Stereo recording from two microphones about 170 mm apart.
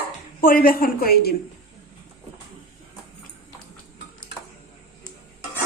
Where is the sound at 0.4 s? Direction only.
60° left (ahead or behind).